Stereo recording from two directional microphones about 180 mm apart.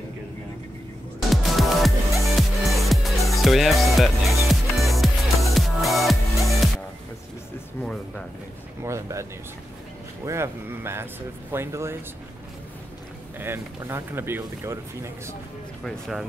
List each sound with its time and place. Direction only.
1.3 s music: centre (ahead or behind)
8.8 s speech: 15° right (ahead or behind)
13.4 s speech: 15° right (ahead or behind)
15.8 s speech: centre (ahead or behind)